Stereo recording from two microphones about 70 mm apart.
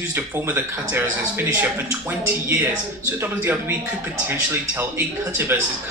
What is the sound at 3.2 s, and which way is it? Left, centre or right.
Speech, right.